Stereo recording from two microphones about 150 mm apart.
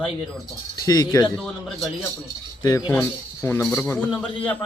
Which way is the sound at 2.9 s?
15° left (ahead or behind).